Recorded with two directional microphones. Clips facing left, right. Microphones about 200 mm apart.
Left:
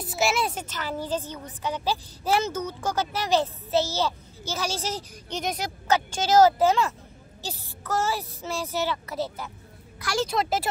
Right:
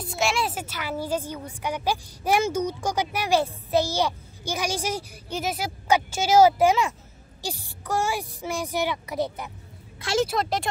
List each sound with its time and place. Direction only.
0.0 s a woman's voice: 5° left (ahead or behind); by 10.2 s 25° right (ahead or behind)
10.2 s speech: centre (ahead or behind)